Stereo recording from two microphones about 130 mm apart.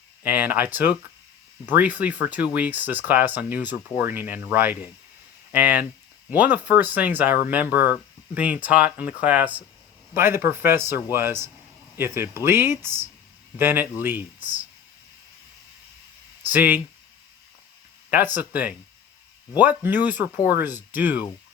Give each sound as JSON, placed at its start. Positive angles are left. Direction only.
{"t": 0.2, "sound": "speech", "side_deg": -15}
{"t": 16.5, "sound": "speech", "side_deg": -15}
{"t": 18.1, "sound": "speech", "side_deg": -15}